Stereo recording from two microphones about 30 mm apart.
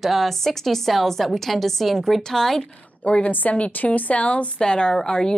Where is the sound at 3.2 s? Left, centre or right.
Left.